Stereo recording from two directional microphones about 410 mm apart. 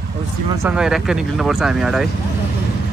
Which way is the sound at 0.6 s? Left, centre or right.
Centre.